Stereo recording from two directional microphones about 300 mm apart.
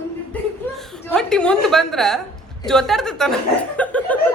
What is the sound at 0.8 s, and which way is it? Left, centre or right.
A woman's voice, centre.